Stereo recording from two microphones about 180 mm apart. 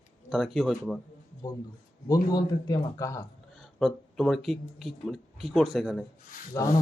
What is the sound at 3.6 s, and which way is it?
Speech, centre (ahead or behind).